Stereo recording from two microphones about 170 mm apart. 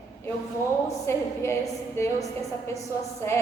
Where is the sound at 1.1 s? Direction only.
15° left (ahead or behind).